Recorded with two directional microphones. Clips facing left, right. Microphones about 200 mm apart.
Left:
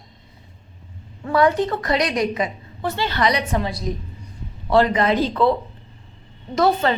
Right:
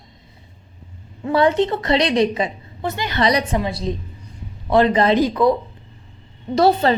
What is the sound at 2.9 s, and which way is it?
Speech, 15° right (ahead or behind).